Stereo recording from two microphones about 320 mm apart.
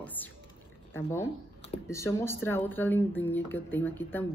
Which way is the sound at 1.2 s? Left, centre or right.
Centre.